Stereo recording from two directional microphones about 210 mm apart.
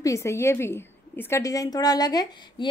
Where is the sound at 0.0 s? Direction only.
15° left (ahead or behind).